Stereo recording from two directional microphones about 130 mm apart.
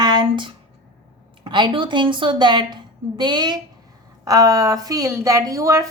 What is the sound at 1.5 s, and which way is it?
A woman's voice, 35° right (ahead or behind).